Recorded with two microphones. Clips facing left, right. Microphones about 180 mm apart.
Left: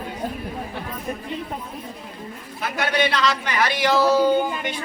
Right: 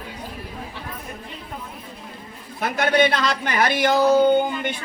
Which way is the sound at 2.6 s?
50° right (ahead or behind).